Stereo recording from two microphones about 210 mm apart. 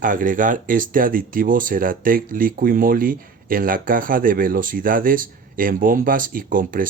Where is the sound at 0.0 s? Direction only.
40° right (ahead or behind).